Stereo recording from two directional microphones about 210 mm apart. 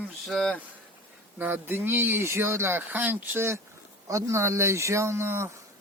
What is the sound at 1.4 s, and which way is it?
Speech, 10° right (ahead or behind).